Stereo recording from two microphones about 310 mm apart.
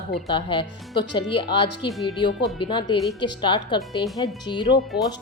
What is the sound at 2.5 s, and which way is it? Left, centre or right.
Speech, centre.